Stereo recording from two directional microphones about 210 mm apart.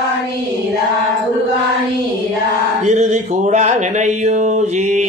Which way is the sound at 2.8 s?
35° right (ahead or behind).